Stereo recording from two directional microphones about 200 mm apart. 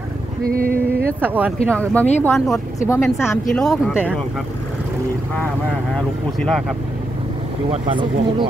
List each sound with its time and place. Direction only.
0.5 s a sound: 45° right (ahead or behind)
1.2 s speech: 10° right (ahead or behind)
1.7 s speech: 5° left (ahead or behind)
2.9 s speech: 10° left (ahead or behind)
3.6 s speech: centre (ahead or behind)
5.9 s speech: 5° left (ahead or behind)
7.7 s speech: 30° right (ahead or behind)